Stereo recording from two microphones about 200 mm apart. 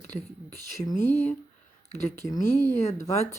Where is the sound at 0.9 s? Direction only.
35° left (ahead or behind).